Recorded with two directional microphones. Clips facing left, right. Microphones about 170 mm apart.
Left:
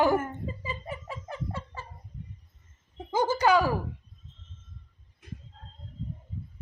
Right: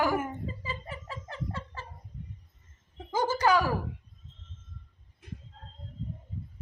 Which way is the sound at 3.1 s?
15° left (ahead or behind).